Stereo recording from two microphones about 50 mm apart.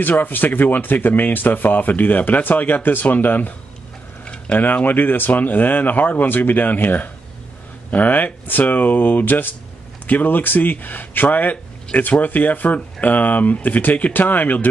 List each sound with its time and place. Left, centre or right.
0.2 s speech: left
4.2 s mechanisms: centre
4.6 s speech: left